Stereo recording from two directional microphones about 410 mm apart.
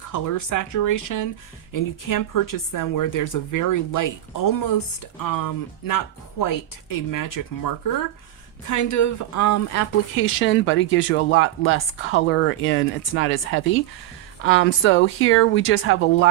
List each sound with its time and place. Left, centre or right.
0.1 s a woman's voice: left